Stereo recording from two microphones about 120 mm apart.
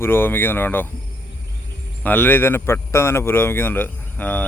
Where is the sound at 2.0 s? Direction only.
15° left (ahead or behind).